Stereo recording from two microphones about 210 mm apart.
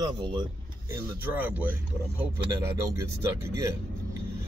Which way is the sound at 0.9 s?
10° right (ahead or behind).